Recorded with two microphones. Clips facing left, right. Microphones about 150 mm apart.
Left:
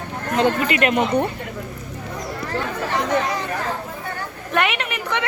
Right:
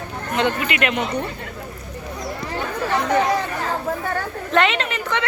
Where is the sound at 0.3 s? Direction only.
40° left (ahead or behind).